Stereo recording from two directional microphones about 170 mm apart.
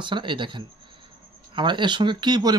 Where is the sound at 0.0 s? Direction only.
30° right (ahead or behind).